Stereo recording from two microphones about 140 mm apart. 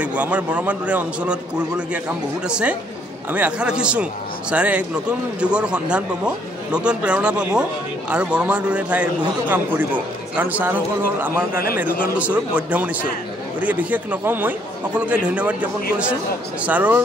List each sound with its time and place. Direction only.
0.0 s a man's voice: 10° right (ahead or behind)
2.4 s a man's voice: 5° right (ahead or behind)
10.3 s a man's voice: 10° right (ahead or behind)
11.5 s speech: 90° left
12.2 s a man's voice: 10° right (ahead or behind)